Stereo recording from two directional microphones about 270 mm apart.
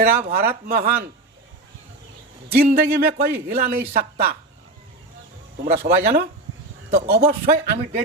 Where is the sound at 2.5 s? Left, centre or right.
Right.